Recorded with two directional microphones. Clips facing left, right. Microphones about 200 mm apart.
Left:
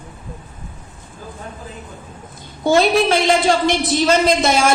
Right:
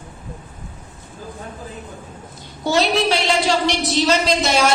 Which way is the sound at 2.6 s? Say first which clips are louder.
Left 4 dB; 50° left (ahead or behind).